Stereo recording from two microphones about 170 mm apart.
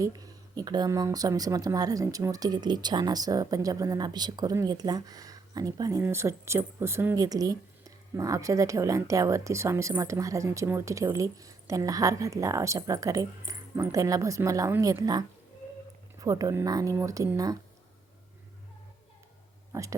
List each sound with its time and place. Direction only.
0.0 s speech: 20° right (ahead or behind)
16.2 s speech: 20° right (ahead or behind)
19.7 s speech: 15° right (ahead or behind)